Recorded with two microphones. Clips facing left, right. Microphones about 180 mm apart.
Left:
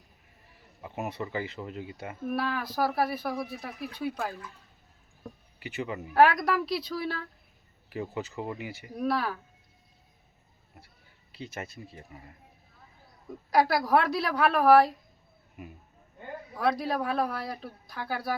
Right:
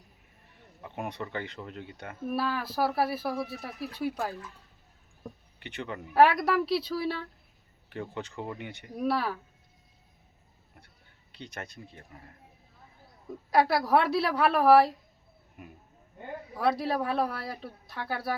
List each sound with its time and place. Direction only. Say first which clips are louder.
0.8 s speech: left 2 dB; 5° left (ahead or behind)
10.8 s speech: left 3 dB; 5° left (ahead or behind)
13.5 s speech: even; centre (ahead or behind)